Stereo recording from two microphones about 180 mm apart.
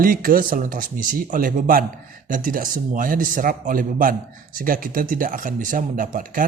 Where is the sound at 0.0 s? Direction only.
50° right (ahead or behind).